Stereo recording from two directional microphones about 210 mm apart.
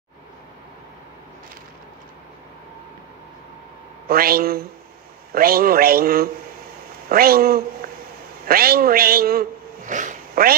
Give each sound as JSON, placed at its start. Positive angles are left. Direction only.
{"t": 4.1, "sound": "a man's voice", "side_deg": -45}